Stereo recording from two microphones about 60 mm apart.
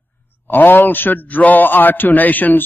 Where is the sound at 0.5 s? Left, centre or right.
Left.